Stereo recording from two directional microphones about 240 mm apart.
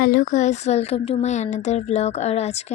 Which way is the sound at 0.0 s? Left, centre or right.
Left.